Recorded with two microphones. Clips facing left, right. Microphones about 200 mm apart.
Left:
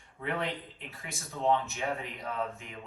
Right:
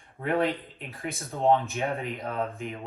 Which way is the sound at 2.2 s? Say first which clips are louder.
Right 4 dB; 55° right (ahead or behind).